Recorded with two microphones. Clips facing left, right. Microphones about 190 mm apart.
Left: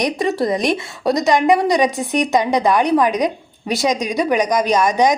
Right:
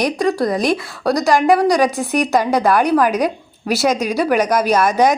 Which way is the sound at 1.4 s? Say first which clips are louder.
Right 3 dB; 20° left (ahead or behind).